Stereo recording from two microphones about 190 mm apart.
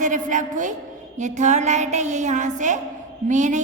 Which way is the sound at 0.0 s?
40° right (ahead or behind).